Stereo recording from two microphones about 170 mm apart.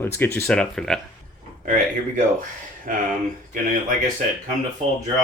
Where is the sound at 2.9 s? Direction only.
50° right (ahead or behind).